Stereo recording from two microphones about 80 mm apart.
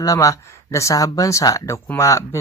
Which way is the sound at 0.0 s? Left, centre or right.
Left.